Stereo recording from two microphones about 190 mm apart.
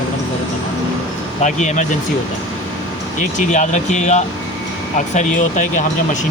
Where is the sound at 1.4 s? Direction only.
40° left (ahead or behind).